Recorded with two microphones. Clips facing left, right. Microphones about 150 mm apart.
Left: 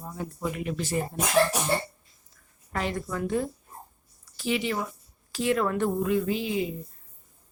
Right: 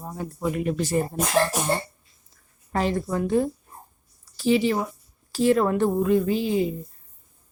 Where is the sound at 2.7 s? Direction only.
35° right (ahead or behind).